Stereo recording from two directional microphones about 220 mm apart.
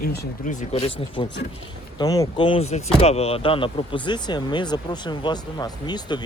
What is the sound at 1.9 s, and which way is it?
Speech, 15° left (ahead or behind).